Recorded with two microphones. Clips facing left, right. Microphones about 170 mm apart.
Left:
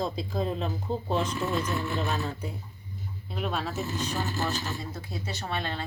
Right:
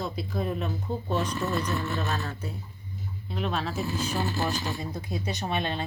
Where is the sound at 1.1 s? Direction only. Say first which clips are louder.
Even; 25° left (ahead or behind).